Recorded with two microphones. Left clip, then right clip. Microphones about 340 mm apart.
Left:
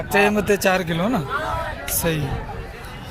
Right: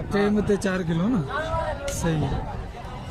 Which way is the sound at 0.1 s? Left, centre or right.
Left.